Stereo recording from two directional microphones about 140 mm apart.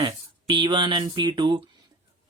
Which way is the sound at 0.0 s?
35° right (ahead or behind).